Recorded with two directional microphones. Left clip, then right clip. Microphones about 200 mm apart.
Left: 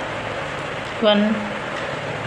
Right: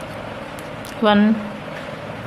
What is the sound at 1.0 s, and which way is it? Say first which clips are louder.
Speech: even; 35° right (ahead or behind).